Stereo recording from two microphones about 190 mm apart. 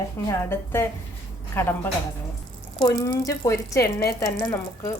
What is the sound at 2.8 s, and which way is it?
A woman's voice, 20° left (ahead or behind).